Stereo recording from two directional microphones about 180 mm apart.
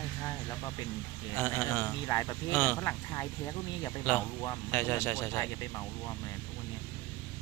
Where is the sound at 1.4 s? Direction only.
15° left (ahead or behind).